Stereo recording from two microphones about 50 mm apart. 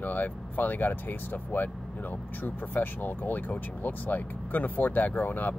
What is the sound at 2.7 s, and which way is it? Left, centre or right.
Speech, left.